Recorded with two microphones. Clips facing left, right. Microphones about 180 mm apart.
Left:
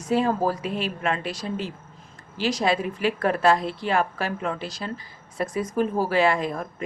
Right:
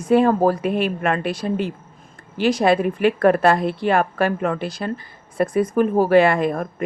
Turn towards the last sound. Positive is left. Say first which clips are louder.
# right 5 dB
turn(degrees=-55)  # may be behind; listen again after turning